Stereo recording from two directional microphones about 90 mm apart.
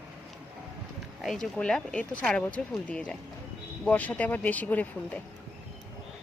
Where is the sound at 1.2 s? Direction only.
5° left (ahead or behind).